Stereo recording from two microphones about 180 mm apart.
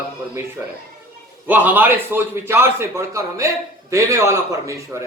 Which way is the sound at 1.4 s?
10° right (ahead or behind).